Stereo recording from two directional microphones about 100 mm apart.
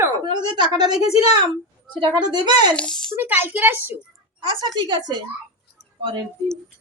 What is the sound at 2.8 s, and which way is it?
Speech, 5° left (ahead or behind).